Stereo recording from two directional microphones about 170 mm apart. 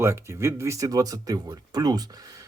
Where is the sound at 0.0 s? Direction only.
15° right (ahead or behind).